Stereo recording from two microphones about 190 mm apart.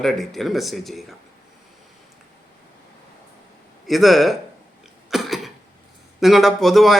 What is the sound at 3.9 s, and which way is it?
Speech, centre (ahead or behind).